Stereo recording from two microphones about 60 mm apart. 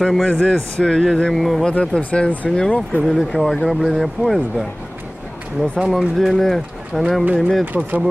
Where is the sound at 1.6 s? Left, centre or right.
Centre.